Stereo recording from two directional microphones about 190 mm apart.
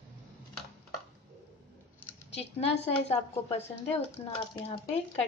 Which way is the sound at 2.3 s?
35° left (ahead or behind).